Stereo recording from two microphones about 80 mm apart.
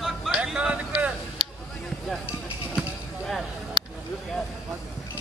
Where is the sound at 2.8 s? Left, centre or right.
Centre.